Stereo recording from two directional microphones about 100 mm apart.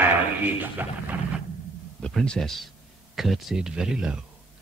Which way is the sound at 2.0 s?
10° left (ahead or behind).